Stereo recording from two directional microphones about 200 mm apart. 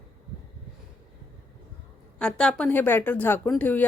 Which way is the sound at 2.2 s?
5° left (ahead or behind).